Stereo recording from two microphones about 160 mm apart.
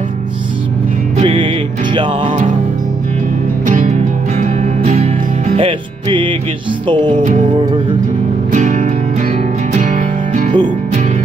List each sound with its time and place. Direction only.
1.1 s music: 35° right (ahead or behind)
3.6 s music: 50° right (ahead or behind)
5.6 s music: 30° right (ahead or behind)
7.2 s music: 55° right (ahead or behind)